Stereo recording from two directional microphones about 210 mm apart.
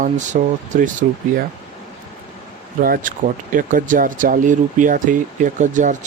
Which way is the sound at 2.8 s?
40° right (ahead or behind).